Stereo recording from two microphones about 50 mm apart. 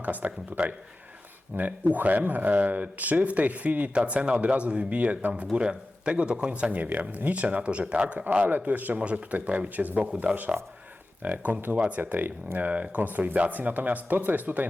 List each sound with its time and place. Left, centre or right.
0.0 s speech: right
3.9 s speech: right
5.5 s speech: centre
8.4 s speech: right
10.5 s speech: centre
11.2 s speech: right